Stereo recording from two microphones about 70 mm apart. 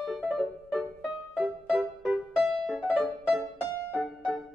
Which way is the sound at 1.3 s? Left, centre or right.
Centre.